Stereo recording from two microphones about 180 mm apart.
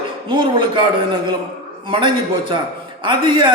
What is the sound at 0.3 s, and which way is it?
Speech, 25° right (ahead or behind).